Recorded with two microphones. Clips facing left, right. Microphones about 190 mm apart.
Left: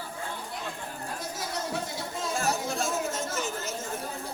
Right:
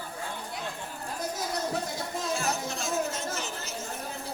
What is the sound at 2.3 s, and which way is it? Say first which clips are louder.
Chatter: left 4 dB; 50° left (ahead or behind).